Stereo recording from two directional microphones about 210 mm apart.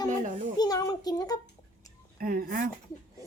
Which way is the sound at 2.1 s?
45° right (ahead or behind).